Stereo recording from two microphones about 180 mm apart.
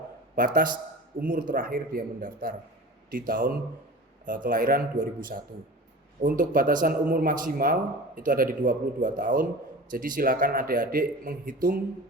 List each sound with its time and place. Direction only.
0.3 s speech: 50° right (ahead or behind)